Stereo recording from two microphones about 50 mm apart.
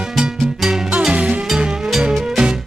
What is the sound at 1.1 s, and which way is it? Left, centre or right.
Music, right.